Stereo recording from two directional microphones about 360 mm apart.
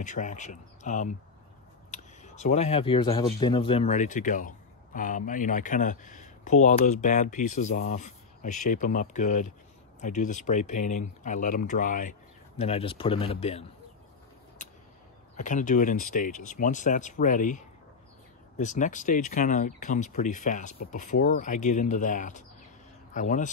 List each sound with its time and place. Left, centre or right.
0.0 s speech: left
15.3 s speech: left